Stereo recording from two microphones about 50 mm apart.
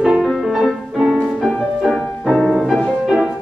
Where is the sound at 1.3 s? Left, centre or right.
Centre.